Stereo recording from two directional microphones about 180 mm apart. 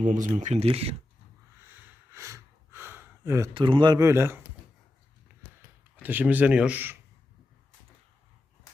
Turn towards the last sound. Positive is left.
turn(degrees=-10)  # may be behind; listen again after turning